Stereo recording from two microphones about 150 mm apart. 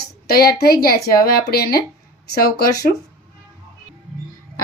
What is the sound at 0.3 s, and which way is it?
Speech, 90° left.